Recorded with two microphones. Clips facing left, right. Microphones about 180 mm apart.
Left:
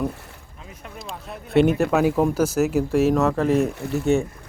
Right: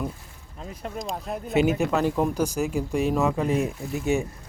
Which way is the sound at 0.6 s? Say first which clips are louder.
Right 6 dB; 35° right (ahead or behind).